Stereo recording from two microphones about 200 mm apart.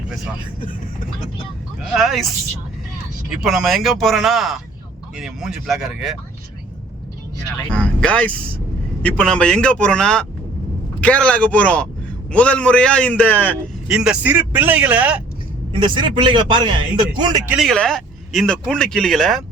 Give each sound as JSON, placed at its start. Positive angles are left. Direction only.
{"t": 0.6, "sound": "speech", "side_deg": 45}
{"t": 1.8, "sound": "speech", "side_deg": 0}
{"t": 3.2, "sound": "speech", "side_deg": 0}
{"t": 7.7, "sound": "a man's voice", "side_deg": 5}
{"t": 13.8, "sound": "a man's voice", "side_deg": -5}
{"t": 15.7, "sound": "speech", "side_deg": -25}
{"t": 17.5, "sound": "speech", "side_deg": 0}